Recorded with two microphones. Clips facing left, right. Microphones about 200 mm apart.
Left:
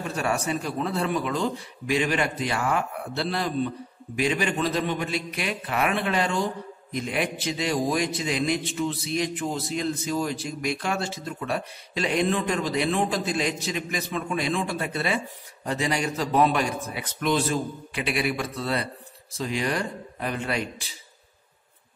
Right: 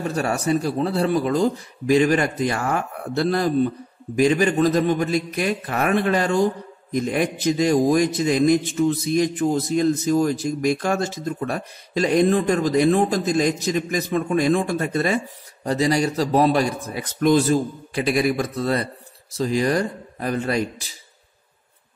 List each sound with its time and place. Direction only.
0.1 s a man's voice: 40° right (ahead or behind)